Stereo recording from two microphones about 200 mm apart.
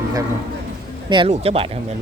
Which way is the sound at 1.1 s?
25° right (ahead or behind).